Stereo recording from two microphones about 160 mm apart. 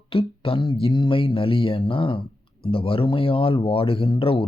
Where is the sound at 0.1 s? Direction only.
35° left (ahead or behind).